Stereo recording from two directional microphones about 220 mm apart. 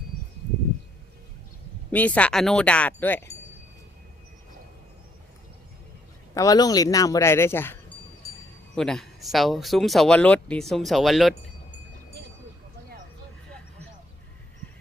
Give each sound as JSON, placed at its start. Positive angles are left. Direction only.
{"t": 1.9, "sound": "speech", "side_deg": 5}
{"t": 6.3, "sound": "speech", "side_deg": 15}